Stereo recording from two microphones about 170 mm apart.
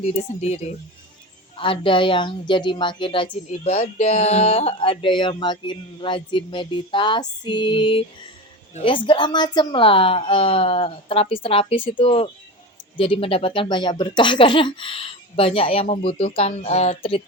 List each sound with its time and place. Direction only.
0.0 s speech: 40° left (ahead or behind)